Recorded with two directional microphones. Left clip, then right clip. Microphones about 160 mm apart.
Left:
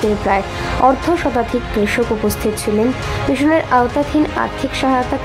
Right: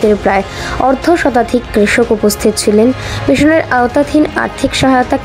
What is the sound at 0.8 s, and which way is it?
Speech, 20° right (ahead or behind).